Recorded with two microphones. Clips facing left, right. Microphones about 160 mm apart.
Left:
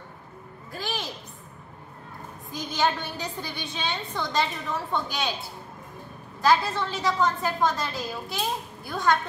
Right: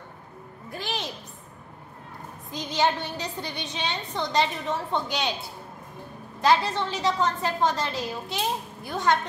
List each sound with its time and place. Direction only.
0.7 s music: 20° right (ahead or behind)
2.5 s a woman's voice: 20° right (ahead or behind)
6.4 s a woman's voice: 20° right (ahead or behind)